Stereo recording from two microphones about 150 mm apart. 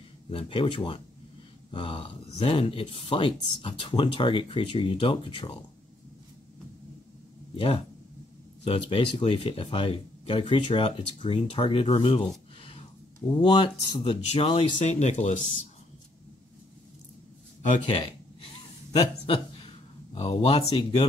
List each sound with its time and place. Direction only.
0.3 s speech: 35° left (ahead or behind)
7.5 s speech: 40° left (ahead or behind)
13.4 s speech: 30° left (ahead or behind); by 15.4 s 50° left (ahead or behind)
17.8 s a sound: 40° left (ahead or behind)
18.9 s speech: 35° left (ahead or behind)